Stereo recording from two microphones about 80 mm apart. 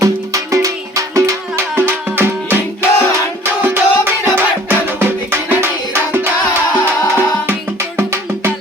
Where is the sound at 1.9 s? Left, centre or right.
Right.